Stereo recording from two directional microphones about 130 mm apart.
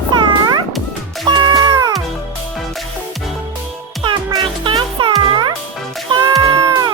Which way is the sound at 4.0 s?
40° right (ahead or behind).